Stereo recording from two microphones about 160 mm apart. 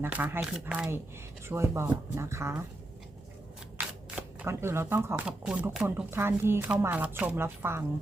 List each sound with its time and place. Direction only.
0.0 s speech: 10° right (ahead or behind)
4.1 s speech: 15° right (ahead or behind)